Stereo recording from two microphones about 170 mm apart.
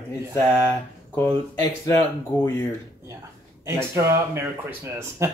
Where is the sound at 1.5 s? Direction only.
10° left (ahead or behind).